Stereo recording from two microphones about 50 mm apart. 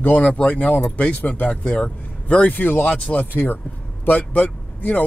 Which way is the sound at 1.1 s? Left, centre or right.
Left.